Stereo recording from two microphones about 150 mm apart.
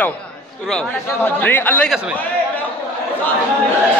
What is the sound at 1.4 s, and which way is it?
Speech, 10° left (ahead or behind).